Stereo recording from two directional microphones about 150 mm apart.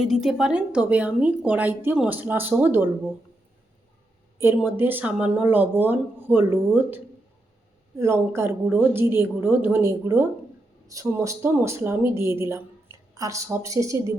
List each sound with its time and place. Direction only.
0.0 s a woman's voice: centre (ahead or behind)
4.4 s a woman's voice: 15° right (ahead or behind)